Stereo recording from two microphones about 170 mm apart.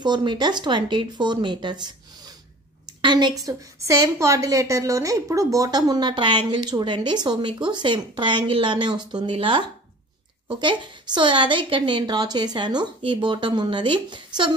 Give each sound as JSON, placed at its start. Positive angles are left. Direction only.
{"t": 0.0, "sound": "a woman's voice", "side_deg": -25}
{"t": 3.0, "sound": "a woman's voice", "side_deg": -25}